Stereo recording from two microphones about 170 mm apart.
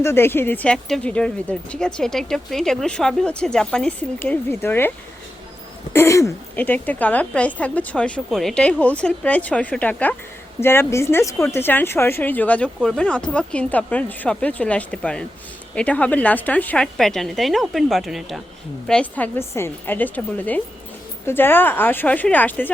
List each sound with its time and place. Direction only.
0.0 s speech: 15° left (ahead or behind)
5.9 s speech: 15° left (ahead or behind)